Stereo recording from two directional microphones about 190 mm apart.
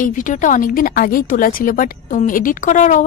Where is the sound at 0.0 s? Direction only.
45° left (ahead or behind).